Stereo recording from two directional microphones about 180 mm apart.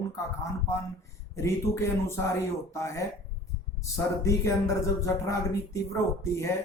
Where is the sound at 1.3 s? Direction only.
15° left (ahead or behind).